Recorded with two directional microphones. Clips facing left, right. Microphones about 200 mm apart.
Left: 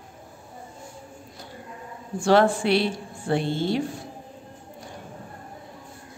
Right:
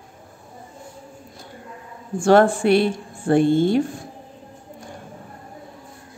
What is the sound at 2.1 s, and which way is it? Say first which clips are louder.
A woman's voice: right 4 dB; 50° right (ahead or behind).